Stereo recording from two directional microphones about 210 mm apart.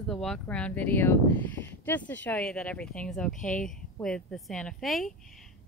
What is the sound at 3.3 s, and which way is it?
Speech, 40° left (ahead or behind).